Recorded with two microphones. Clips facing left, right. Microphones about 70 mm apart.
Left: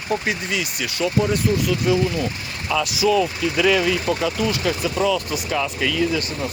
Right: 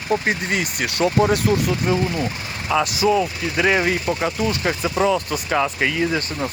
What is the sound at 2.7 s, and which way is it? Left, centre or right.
Speech, right.